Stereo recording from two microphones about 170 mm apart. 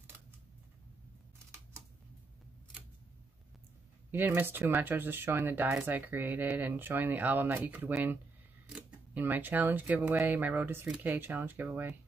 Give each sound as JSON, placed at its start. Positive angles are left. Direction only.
{"t": 4.1, "sound": "speech", "side_deg": -10}